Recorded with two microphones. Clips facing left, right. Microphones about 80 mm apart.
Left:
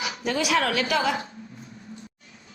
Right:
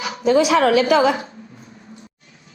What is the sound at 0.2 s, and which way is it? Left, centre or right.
A woman's voice, right.